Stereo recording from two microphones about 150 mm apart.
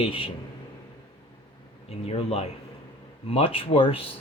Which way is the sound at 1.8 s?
40° left (ahead or behind).